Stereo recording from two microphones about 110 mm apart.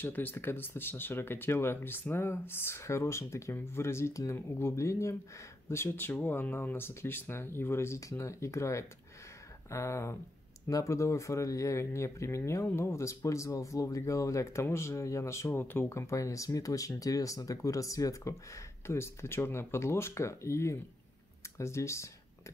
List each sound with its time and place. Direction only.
0.0 s speech: 20° left (ahead or behind)